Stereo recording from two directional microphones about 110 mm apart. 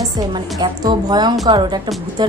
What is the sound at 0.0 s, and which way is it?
A woman's voice, 40° right (ahead or behind).